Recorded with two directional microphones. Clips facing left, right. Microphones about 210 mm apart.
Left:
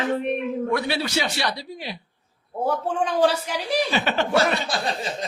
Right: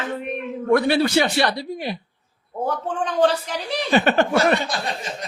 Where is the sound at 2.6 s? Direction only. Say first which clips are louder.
Left 1 dB; 10° left (ahead or behind).